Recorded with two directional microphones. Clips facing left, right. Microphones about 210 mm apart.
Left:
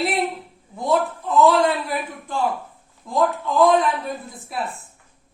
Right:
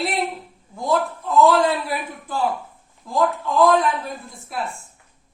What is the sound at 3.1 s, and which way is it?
A woman's voice, centre (ahead or behind).